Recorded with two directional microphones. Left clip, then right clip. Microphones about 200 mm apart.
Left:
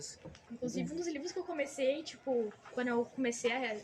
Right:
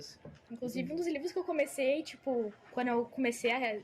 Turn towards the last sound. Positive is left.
turn(degrees=-35)  # may be behind; listen again after turning